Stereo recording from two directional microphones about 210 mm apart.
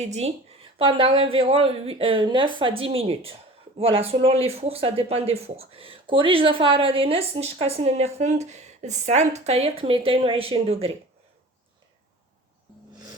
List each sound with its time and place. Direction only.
0.0 s speech: 30° right (ahead or behind)